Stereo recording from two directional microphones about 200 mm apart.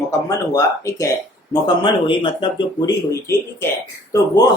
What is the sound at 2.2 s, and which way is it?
Speech, 25° left (ahead or behind).